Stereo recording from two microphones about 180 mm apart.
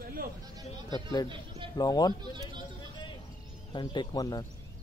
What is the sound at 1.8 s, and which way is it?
Speech, 20° left (ahead or behind).